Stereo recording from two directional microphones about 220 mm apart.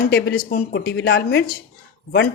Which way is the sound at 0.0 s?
50° left (ahead or behind).